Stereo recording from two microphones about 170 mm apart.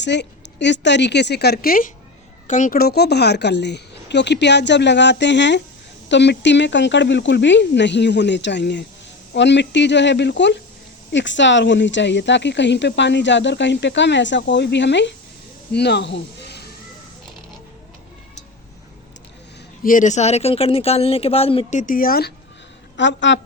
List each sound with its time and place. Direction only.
0.0 s speech: 90° left
15.7 s speech: 80° left
19.8 s speech: 50° left (ahead or behind); by 21.8 s 35° left (ahead or behind)
21.8 s speech: 55° left (ahead or behind)
23.0 s speech: 90° left